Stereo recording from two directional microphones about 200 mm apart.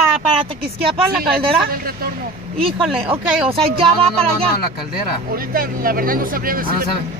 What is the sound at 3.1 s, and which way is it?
Speech, 25° right (ahead or behind).